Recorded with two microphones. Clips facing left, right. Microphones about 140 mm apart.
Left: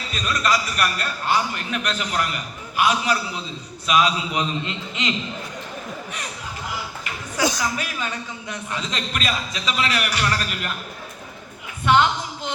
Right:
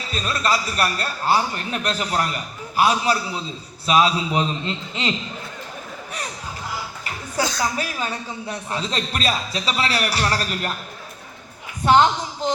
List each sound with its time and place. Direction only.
0.1 s a man's voice: 30° right (ahead or behind)
7.6 s a man's voice: 35° right (ahead or behind)
11.9 s a woman's voice: 35° right (ahead or behind)